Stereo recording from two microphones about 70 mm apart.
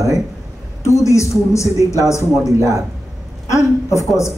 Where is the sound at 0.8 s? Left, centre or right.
Left.